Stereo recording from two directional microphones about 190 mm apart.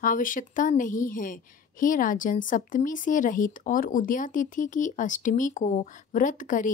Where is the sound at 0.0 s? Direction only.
45° left (ahead or behind).